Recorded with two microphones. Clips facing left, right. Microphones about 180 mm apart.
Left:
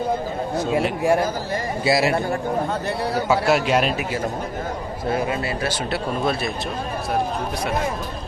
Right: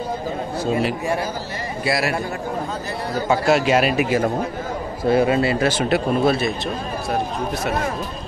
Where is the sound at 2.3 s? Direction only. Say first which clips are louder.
Left 3 dB; 60° left (ahead or behind).